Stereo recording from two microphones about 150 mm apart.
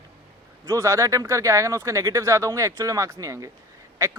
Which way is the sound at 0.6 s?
20° right (ahead or behind).